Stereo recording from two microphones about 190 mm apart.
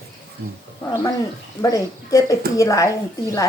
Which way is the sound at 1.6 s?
15° left (ahead or behind).